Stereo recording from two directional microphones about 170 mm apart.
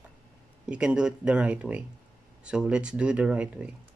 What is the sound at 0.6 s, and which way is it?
Speech, 5° right (ahead or behind).